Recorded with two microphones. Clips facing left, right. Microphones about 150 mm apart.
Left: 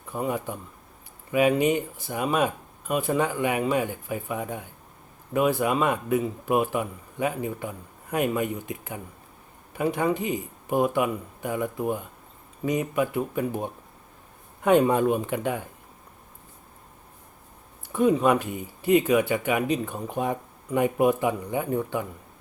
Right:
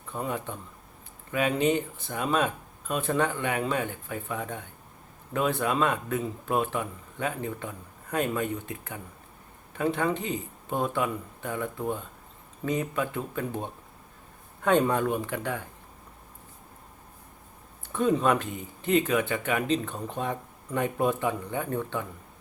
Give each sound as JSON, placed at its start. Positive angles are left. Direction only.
{"t": 0.1, "sound": "speech", "side_deg": 10}
{"t": 17.8, "sound": "speech", "side_deg": 10}